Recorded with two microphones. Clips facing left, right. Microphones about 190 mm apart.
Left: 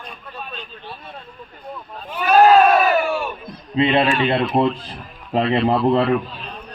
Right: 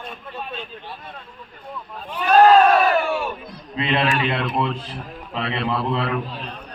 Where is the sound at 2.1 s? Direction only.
5° left (ahead or behind).